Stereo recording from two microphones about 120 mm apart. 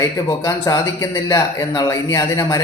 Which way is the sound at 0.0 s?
30° left (ahead or behind).